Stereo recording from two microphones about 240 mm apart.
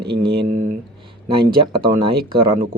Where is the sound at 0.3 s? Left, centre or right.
Right.